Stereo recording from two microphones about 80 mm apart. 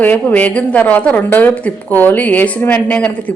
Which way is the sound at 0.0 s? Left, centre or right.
Left.